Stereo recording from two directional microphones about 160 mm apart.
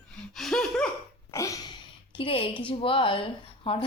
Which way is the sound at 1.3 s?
20° left (ahead or behind).